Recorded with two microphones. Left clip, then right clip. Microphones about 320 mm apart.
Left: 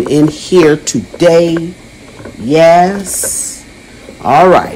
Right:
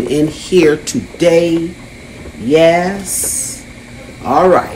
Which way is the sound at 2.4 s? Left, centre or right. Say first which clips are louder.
Left 4 dB; centre.